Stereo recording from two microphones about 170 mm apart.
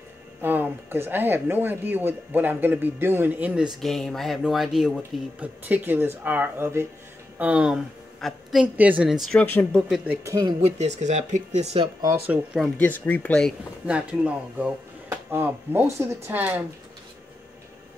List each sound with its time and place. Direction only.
0.4 s speech: 10° right (ahead or behind)
3.8 s a woman's voice: centre (ahead or behind)
9.4 s speech: 10° left (ahead or behind)
9.8 s speech: centre (ahead or behind)
10.2 s speech: 20° right (ahead or behind)
10.6 s speech: 40° right (ahead or behind)
12.3 s speech: centre (ahead or behind)